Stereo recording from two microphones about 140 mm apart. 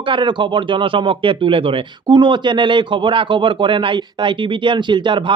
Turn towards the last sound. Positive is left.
turn(degrees=-35)  # may be behind; listen again after turning